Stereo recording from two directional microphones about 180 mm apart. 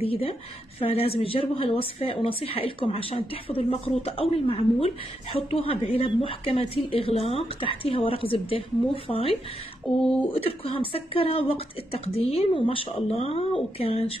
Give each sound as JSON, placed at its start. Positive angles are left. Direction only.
{"t": 0.0, "sound": "a woman's voice", "side_deg": 30}
{"t": 9.8, "sound": "speech", "side_deg": 0}
{"t": 10.2, "sound": "a woman's voice", "side_deg": 30}